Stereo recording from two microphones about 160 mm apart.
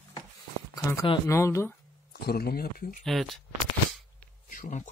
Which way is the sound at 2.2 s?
75° left (ahead or behind).